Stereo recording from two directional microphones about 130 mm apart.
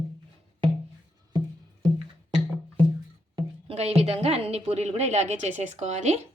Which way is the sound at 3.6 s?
50° right (ahead or behind).